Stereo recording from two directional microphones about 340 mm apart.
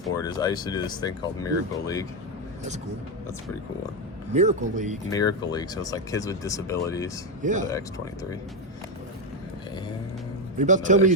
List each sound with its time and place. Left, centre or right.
0.0 s speech: centre
4.4 s speech: right
5.1 s speech: centre
7.4 s speech: right
7.7 s speech: centre
10.6 s speech: right